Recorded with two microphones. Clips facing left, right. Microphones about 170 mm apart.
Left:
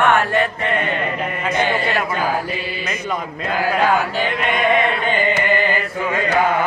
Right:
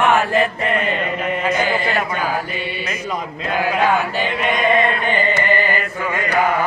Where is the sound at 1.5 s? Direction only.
Centre (ahead or behind).